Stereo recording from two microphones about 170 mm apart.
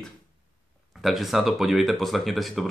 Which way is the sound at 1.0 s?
Centre (ahead or behind).